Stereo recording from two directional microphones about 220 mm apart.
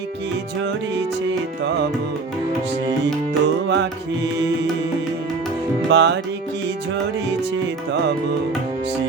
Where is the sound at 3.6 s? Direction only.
55° right (ahead or behind).